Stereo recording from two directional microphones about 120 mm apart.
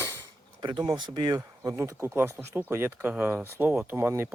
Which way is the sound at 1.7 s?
25° right (ahead or behind).